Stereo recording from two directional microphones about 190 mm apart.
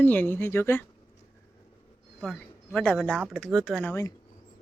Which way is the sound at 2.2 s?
5° left (ahead or behind).